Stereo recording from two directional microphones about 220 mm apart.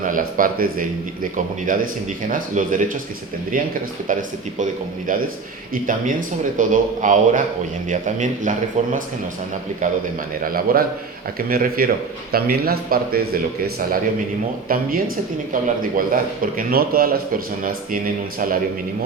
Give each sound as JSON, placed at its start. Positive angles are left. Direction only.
{"t": 0.0, "sound": "a man's voice", "side_deg": -40}
{"t": 4.1, "sound": "a man's voice", "side_deg": -35}